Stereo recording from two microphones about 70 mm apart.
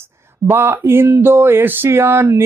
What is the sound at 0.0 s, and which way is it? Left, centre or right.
Speech, right.